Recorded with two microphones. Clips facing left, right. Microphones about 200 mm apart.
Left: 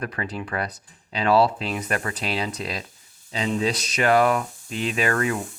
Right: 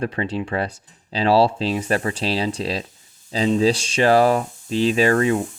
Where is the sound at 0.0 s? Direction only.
25° right (ahead or behind).